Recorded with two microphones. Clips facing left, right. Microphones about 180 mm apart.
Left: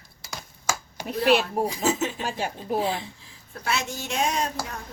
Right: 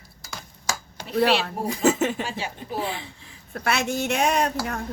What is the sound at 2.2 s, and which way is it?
Speech, 50° left (ahead or behind).